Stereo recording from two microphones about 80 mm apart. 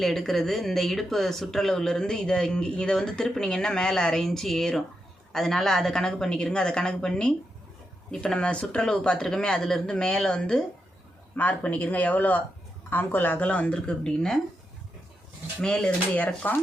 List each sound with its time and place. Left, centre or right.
0.0 s speech: centre
15.6 s speech: centre